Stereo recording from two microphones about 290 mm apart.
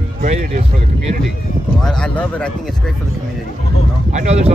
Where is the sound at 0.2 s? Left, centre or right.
Right.